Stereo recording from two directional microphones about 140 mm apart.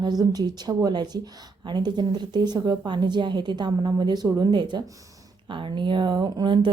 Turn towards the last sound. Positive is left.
turn(degrees=-35)  # may be behind; listen again after turning